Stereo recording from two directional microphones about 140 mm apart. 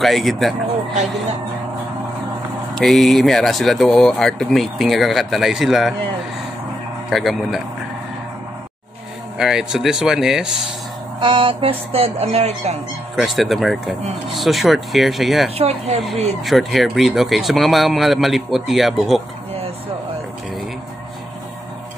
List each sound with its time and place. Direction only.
0.0 s speech: centre (ahead or behind)
2.8 s speech: centre (ahead or behind)
7.1 s speech: centre (ahead or behind)
9.4 s speech: 5° right (ahead or behind)
11.1 s speech: 35° right (ahead or behind)
13.1 s speech: centre (ahead or behind)
15.5 s speech: 50° right (ahead or behind)
16.4 s speech: centre (ahead or behind)